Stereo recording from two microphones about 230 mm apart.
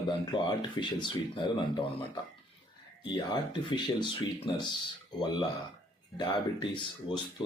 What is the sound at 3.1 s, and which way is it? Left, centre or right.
Speech, centre.